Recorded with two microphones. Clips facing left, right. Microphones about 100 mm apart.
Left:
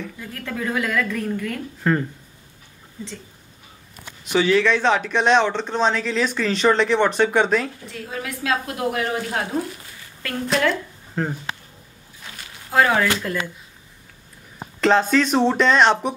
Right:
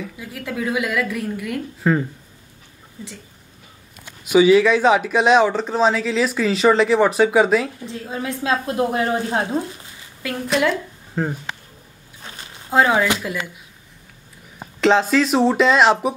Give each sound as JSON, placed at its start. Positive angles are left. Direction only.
{"t": 0.0, "sound": "speech", "side_deg": -10}
{"t": 4.3, "sound": "speech", "side_deg": -10}
{"t": 7.9, "sound": "a woman's voice", "side_deg": -25}
{"t": 10.2, "sound": "speech", "side_deg": -15}
{"t": 10.7, "sound": "a sound", "side_deg": -5}
{"t": 12.2, "sound": "a sound", "side_deg": -30}
{"t": 14.8, "sound": "speech", "side_deg": 0}